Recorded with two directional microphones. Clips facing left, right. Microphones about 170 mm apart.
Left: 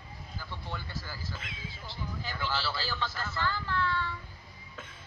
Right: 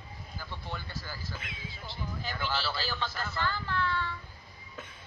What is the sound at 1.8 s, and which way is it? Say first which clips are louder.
Speech: right 1 dB; 20° right (ahead or behind).